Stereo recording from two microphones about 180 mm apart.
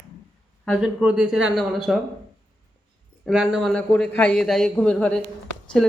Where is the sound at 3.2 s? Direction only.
Centre (ahead or behind).